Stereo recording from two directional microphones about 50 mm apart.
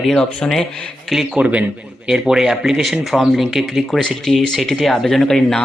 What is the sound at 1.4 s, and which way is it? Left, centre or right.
Speech, right.